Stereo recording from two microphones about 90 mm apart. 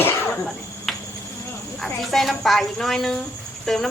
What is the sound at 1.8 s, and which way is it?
A woman's voice, centre (ahead or behind).